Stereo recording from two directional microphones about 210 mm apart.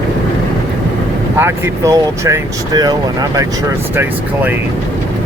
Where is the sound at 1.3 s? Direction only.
10° right (ahead or behind).